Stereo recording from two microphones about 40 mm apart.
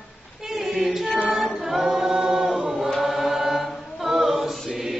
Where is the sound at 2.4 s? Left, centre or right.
Centre.